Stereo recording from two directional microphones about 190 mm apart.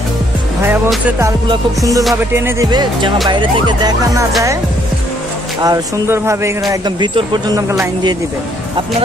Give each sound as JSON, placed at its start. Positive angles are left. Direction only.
{"t": 1.5, "sound": "speech", "side_deg": -20}
{"t": 2.3, "sound": "music", "side_deg": -15}
{"t": 5.6, "sound": "speech", "side_deg": -15}
{"t": 6.7, "sound": "music", "side_deg": -25}